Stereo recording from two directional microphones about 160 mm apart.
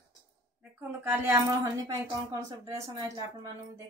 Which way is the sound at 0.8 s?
15° right (ahead or behind).